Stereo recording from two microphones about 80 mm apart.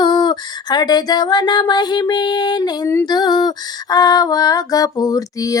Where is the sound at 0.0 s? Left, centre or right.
Left.